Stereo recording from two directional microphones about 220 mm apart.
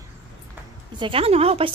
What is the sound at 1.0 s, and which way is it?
Speech, 25° right (ahead or behind).